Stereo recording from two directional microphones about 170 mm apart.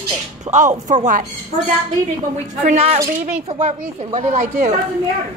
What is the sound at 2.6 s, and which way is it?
A woman's voice, 45° right (ahead or behind).